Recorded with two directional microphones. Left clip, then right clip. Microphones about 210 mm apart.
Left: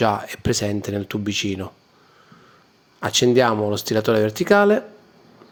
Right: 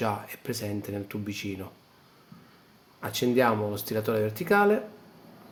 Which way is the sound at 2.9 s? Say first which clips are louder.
Left 9 dB; 35° left (ahead or behind).